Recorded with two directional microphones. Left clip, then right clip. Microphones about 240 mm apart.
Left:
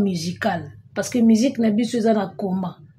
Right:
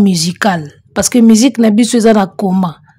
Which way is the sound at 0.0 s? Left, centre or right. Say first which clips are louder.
Right 11 dB; right.